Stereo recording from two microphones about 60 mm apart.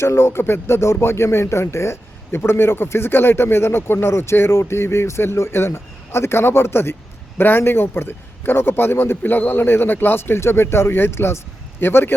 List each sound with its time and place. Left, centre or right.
0.0 s speech: left